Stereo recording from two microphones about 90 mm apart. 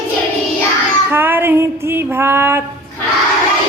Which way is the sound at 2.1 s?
25° right (ahead or behind).